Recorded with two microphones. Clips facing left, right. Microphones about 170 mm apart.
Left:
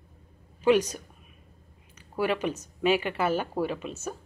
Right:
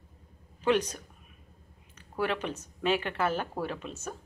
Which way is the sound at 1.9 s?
10° left (ahead or behind).